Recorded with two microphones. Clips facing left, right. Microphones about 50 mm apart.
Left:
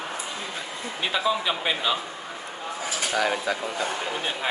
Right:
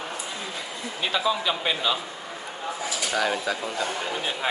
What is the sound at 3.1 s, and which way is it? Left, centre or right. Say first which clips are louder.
A man's voice: left 1 dB; centre.